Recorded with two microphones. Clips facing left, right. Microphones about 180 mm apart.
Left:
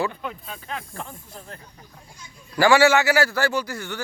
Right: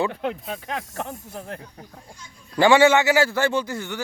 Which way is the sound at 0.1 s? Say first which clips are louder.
Right 6 dB; 70° right (ahead or behind).